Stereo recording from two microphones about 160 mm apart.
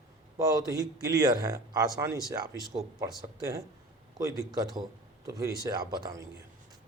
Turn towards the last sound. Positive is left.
turn(degrees=-25)  # may be behind; listen again after turning